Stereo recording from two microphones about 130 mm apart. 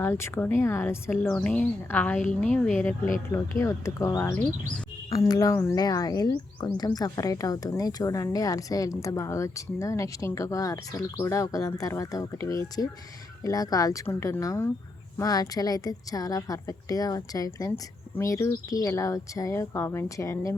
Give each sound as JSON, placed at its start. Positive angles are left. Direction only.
{"t": 0.0, "sound": "speech", "side_deg": 20}
{"t": 3.3, "sound": "speech", "side_deg": 20}